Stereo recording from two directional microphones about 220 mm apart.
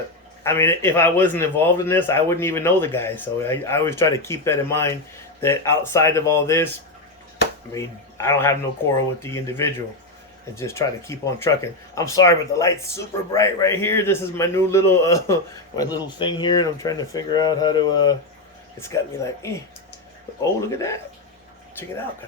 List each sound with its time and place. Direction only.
0.4 s a man's voice: 10° left (ahead or behind)
7.7 s a man's voice: 10° left (ahead or behind)
20.7 s a man's voice: 15° left (ahead or behind)